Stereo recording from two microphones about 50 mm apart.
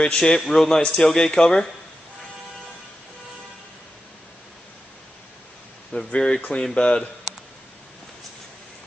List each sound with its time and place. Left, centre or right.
0.0 s a man's voice: centre
6.1 s a man's voice: centre